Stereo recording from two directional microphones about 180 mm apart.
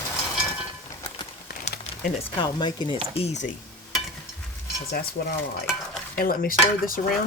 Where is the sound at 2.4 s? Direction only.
25° left (ahead or behind).